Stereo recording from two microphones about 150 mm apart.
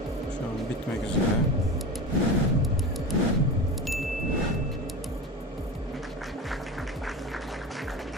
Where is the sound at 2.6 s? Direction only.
Centre (ahead or behind).